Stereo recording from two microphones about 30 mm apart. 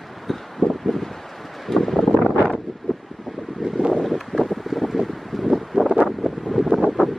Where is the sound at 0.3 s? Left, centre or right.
Centre.